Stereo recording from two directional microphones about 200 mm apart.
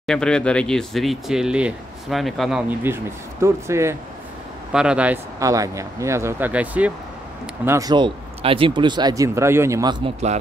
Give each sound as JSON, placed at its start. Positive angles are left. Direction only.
{"t": 0.0, "sound": "speech", "side_deg": 5}
{"t": 2.8, "sound": "speech", "side_deg": -10}